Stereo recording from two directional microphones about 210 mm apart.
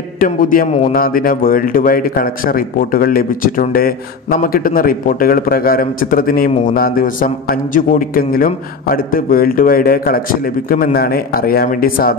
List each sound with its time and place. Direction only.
0.2 s a man's voice: 40° left (ahead or behind)